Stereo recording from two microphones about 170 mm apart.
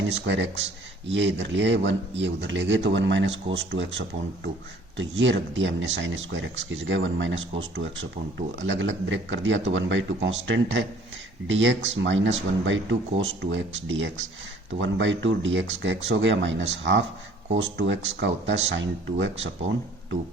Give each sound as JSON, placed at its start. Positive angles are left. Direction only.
{"t": 0.1, "sound": "speech", "side_deg": -90}